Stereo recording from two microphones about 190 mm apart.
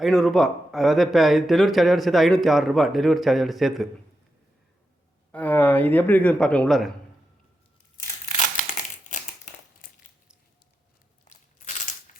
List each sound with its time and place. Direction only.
0.0 s speech: centre (ahead or behind)
5.3 s a man's voice: 10° left (ahead or behind)
9.0 s crumpling: 40° left (ahead or behind)
11.3 s crushing: 40° left (ahead or behind)